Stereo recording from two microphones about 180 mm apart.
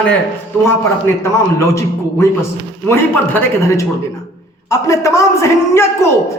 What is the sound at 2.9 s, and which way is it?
Speech, 15° left (ahead or behind).